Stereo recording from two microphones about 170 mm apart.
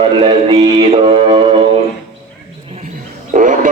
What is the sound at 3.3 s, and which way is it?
Music, 50° right (ahead or behind).